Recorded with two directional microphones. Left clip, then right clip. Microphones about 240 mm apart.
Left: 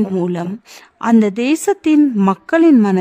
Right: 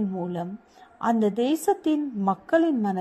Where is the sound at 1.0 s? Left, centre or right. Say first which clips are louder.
Left 8 dB; left.